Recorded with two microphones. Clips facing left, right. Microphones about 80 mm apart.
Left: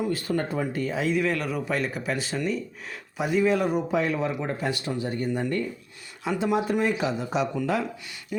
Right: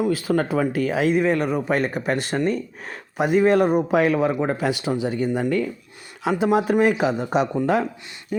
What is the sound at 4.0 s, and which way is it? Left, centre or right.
Speech, right.